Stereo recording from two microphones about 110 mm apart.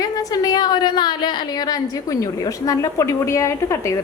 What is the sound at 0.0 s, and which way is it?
A woman's voice, 35° left (ahead or behind).